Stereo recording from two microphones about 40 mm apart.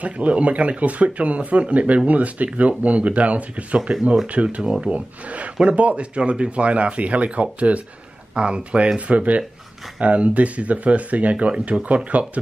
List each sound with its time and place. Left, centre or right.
0.0 s speech: right